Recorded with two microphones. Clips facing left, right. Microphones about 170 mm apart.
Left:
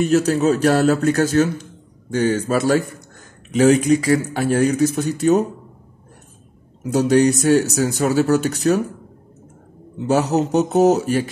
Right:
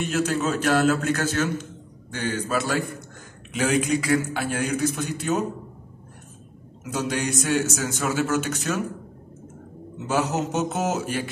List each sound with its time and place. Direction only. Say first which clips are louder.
0.0 s a man's voice: left 8 dB; 40° left (ahead or behind)
6.8 s a man's voice: left 12 dB; 40° left (ahead or behind)
9.9 s a man's voice: left 7 dB; 40° left (ahead or behind)